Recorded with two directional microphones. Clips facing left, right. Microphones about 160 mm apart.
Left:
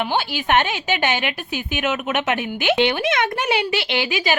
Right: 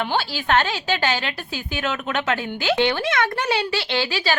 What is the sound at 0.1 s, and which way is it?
Speech, 15° left (ahead or behind).